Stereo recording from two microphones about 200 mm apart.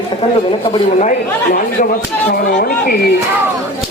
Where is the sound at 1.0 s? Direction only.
40° left (ahead or behind).